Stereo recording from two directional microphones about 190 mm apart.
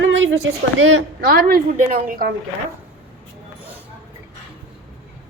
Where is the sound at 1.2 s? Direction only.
50° right (ahead or behind).